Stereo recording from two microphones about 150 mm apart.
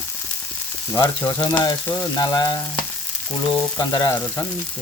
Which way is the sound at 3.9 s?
25° left (ahead or behind).